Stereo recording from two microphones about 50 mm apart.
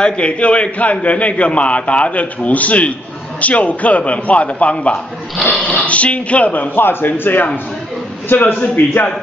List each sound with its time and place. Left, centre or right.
0.0 s a man's voice: left